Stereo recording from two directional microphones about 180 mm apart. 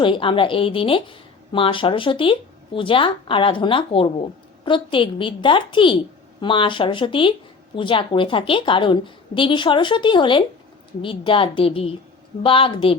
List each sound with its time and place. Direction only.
0.0 s speech: 30° left (ahead or behind)